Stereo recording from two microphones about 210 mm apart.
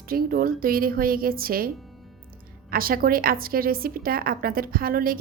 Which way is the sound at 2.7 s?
45° right (ahead or behind).